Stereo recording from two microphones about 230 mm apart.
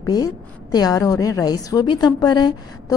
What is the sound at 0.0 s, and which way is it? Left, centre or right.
A woman's voice, centre.